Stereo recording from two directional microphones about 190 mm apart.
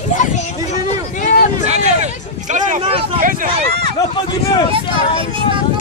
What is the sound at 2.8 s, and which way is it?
Speech, 30° right (ahead or behind).